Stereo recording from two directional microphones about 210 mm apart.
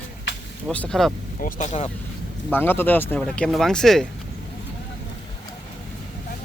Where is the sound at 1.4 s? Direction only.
35° left (ahead or behind).